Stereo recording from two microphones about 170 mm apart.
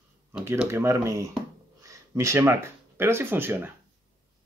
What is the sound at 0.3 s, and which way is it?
Speech, 10° right (ahead or behind).